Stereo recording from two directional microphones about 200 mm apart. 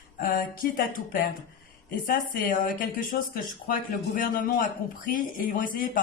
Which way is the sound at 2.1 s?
45° left (ahead or behind).